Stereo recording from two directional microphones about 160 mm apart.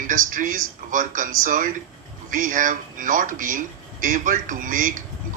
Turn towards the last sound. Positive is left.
turn(degrees=-55)  # may be behind; listen again after turning